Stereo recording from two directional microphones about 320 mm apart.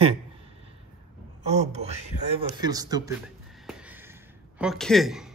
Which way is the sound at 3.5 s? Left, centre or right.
Centre.